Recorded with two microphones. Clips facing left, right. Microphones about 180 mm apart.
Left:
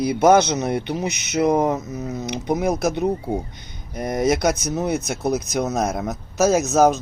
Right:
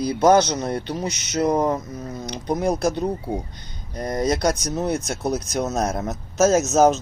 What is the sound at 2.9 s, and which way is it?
A man's voice, 20° left (ahead or behind).